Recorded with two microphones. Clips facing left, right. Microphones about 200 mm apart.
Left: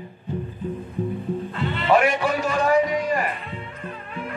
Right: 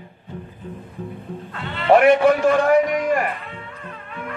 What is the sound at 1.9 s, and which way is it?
Speech, 60° right (ahead or behind).